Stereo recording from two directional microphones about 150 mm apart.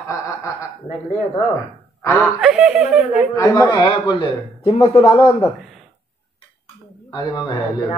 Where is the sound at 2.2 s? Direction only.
Centre (ahead or behind).